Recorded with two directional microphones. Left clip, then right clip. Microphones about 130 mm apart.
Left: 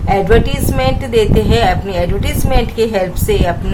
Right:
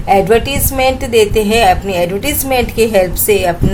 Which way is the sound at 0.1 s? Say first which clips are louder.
Right 2 dB; 25° right (ahead or behind).